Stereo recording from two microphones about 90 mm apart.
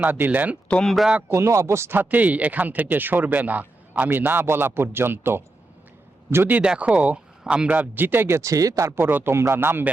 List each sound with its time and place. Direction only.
0.0 s speech: 20° right (ahead or behind)
0.7 s speech: 5° left (ahead or behind)
1.3 s speech: 30° right (ahead or behind)
6.6 s speech: 15° right (ahead or behind)